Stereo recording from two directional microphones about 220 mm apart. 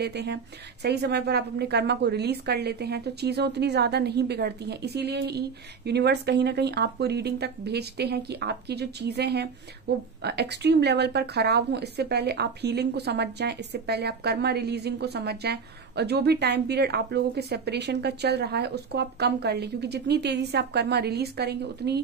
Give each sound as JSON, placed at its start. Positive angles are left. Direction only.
{"t": 0.0, "sound": "a woman's voice", "side_deg": -50}